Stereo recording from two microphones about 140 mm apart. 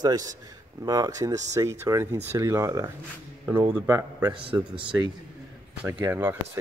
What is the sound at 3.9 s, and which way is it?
Speech, 25° right (ahead or behind).